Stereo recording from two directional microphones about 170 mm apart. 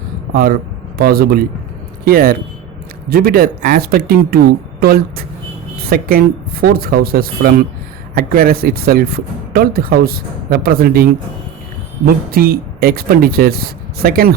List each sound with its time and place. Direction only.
0.9 s speech: 60° right (ahead or behind)